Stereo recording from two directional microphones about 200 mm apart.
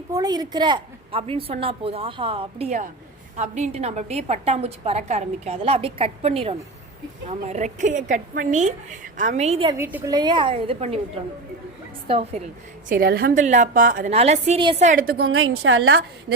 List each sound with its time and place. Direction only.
0.1 s a woman's voice: 20° right (ahead or behind)
9.7 s a woman's voice: 10° right (ahead or behind); by 11.0 s 30° right (ahead or behind)
12.0 s a woman's voice: 30° right (ahead or behind)
12.9 s a woman's voice: 50° right (ahead or behind); by 14.8 s 30° right (ahead or behind)
14.8 s a woman's voice: 45° right (ahead or behind)
15.3 s a woman's voice: 90° right